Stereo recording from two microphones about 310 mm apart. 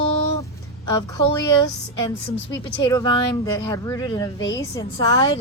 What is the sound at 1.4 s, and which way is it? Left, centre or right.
A man's voice, centre.